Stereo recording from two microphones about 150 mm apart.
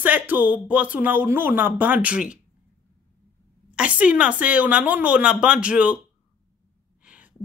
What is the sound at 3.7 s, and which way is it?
Speech, 10° right (ahead or behind).